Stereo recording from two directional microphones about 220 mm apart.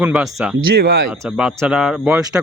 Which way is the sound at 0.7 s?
45° right (ahead or behind).